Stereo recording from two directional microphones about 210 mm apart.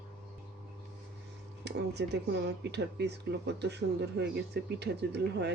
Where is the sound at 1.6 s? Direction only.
55° right (ahead or behind).